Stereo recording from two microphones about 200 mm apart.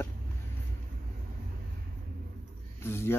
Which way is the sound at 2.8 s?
10° left (ahead or behind).